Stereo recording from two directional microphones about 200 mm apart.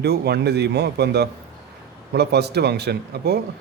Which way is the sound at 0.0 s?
55° right (ahead or behind).